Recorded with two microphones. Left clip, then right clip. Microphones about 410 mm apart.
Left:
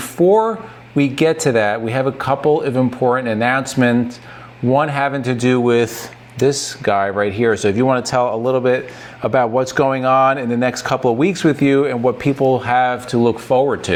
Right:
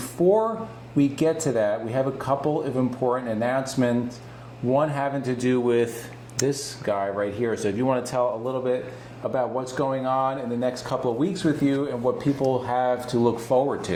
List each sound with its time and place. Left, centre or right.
0.9 s speech: left
11.2 s speech: left
12.1 s speech: left